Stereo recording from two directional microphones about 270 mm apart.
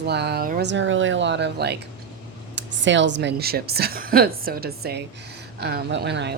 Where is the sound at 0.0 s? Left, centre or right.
Right.